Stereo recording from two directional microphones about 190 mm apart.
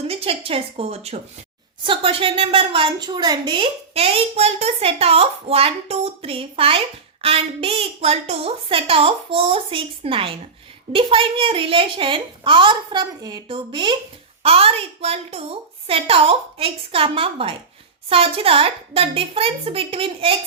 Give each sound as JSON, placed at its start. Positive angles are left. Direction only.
{"t": 0.1, "sound": "a woman's voice", "side_deg": -30}